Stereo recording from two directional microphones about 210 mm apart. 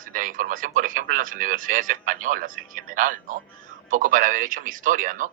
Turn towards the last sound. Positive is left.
turn(degrees=-40)  # may be behind; listen again after turning